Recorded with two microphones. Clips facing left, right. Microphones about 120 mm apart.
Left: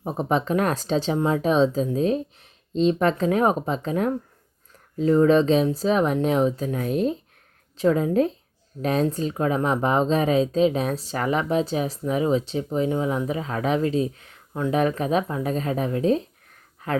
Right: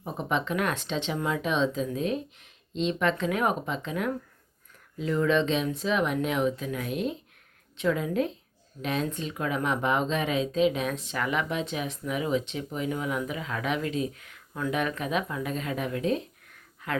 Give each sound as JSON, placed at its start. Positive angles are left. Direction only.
{"t": 0.0, "sound": "a woman's voice", "side_deg": 40}